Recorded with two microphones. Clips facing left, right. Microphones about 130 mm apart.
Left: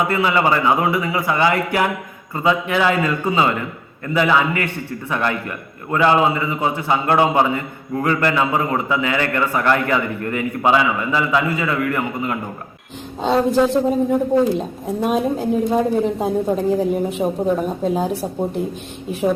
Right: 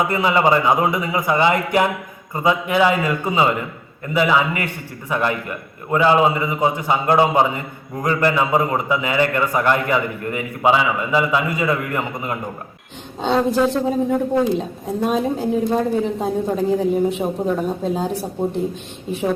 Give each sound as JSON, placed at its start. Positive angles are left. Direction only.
{"t": 0.1, "sound": "a man's voice", "side_deg": -15}
{"t": 13.2, "sound": "a woman's voice", "side_deg": 0}